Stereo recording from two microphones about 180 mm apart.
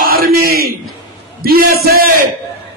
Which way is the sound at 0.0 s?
55° right (ahead or behind).